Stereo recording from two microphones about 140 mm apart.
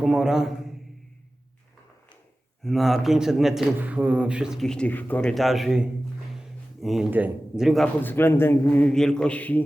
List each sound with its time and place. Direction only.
0.0 s a man's voice: 5° right (ahead or behind)
2.6 s a man's voice: centre (ahead or behind)
5.3 s a man's voice: centre (ahead or behind)
8.0 s mantra: 15° left (ahead or behind)